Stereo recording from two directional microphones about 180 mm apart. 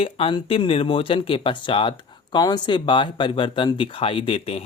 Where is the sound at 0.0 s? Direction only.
30° left (ahead or behind).